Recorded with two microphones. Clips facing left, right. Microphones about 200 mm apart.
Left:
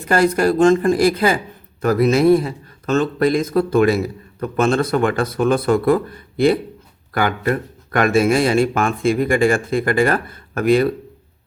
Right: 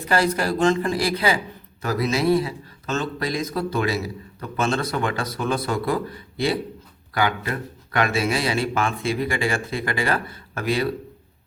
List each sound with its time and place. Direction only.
0.0 s a man's voice: 50° left (ahead or behind)